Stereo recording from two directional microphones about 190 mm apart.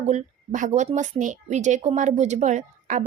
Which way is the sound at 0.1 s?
40° right (ahead or behind).